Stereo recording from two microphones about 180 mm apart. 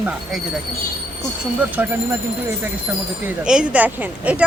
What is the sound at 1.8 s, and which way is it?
Speech, 10° right (ahead or behind).